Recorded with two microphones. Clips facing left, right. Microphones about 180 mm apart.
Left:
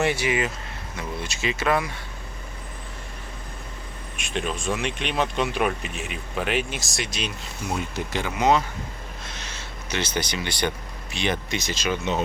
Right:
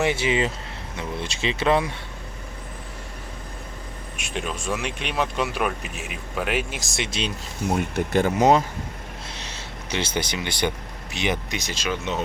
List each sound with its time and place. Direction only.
0.0 s speech: 20° right (ahead or behind)
4.2 s speech: 10° right (ahead or behind)
6.9 s speech: 25° right (ahead or behind)
7.8 s speech: 55° right (ahead or behind); by 8.6 s 40° right (ahead or behind)
10.2 s speech: 20° right (ahead or behind)
11.9 s speech: centre (ahead or behind)